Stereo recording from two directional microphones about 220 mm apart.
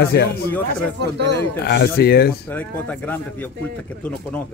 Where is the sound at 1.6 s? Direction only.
45° left (ahead or behind).